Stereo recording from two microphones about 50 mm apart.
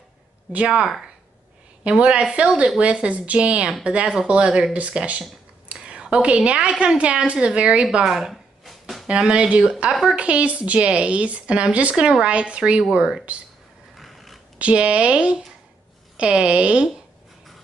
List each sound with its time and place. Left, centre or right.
0.5 s speech: right
1.9 s speech: right
8.0 s a sound: centre
9.0 s speech: centre
13.9 s a sound: centre
14.6 s speech: right